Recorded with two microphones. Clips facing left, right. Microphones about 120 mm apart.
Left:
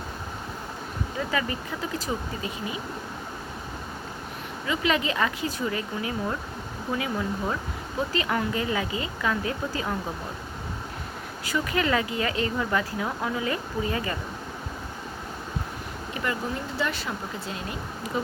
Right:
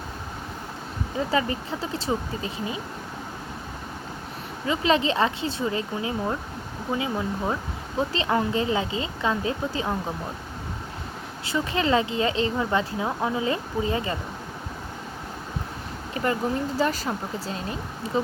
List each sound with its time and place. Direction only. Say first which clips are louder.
1.3 s speech: right 5 dB; 30° right (ahead or behind)
4.6 s speech: right 4 dB; 30° right (ahead or behind)
11.4 s speech: right 1 dB; 25° right (ahead or behind)
16.1 s speech: right 5 dB; 35° right (ahead or behind)